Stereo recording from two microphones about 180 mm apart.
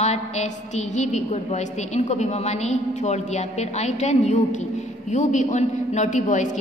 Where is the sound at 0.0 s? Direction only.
40° left (ahead or behind).